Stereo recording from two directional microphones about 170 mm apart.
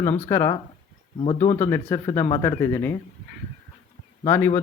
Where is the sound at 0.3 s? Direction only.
15° left (ahead or behind).